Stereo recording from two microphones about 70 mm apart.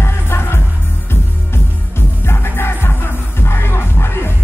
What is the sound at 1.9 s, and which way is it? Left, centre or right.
Music, left.